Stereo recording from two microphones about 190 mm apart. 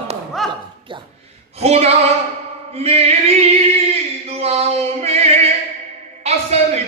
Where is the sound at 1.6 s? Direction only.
35° right (ahead or behind).